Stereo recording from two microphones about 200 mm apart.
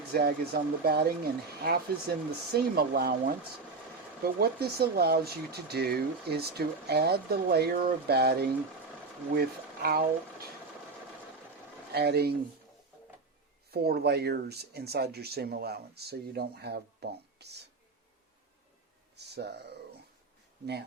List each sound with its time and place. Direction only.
0.1 s speech: 50° right (ahead or behind)
11.9 s speech: 50° right (ahead or behind)
13.7 s speech: 50° right (ahead or behind)
19.1 s a sound: 55° right (ahead or behind)